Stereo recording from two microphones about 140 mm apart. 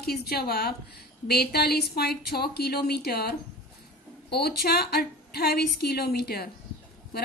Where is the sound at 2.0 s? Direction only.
90° left.